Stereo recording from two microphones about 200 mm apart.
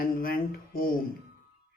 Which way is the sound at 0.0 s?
45° left (ahead or behind).